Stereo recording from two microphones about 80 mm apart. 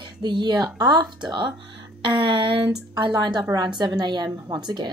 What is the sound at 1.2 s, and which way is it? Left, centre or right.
Speech, right.